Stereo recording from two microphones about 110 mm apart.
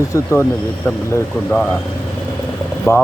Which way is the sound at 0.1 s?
25° left (ahead or behind).